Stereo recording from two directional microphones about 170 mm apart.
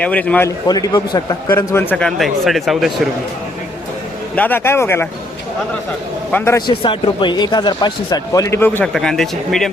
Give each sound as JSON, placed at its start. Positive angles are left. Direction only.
{"t": 0.0, "sound": "speech", "side_deg": 10}
{"t": 0.7, "sound": "a man's voice", "side_deg": 20}
{"t": 1.5, "sound": "speech", "side_deg": 15}
{"t": 4.4, "sound": "speech", "side_deg": 10}
{"t": 6.3, "sound": "speech", "side_deg": 15}
{"t": 6.7, "sound": "a man's voice", "side_deg": 30}
{"t": 8.9, "sound": "speech", "side_deg": 0}